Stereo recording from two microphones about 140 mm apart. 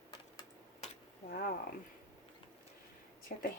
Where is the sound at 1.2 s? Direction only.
90° left.